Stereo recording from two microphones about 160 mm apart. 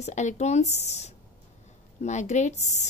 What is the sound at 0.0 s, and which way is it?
A woman's voice, 50° left (ahead or behind).